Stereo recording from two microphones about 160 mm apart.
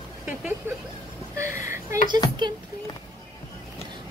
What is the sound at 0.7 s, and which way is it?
Speech, 15° right (ahead or behind).